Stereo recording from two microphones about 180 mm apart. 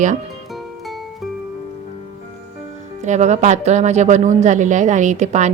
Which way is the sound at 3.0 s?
40° right (ahead or behind).